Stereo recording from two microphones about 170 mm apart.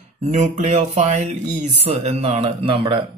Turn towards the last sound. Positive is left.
turn(degrees=-30)  # may be behind; listen again after turning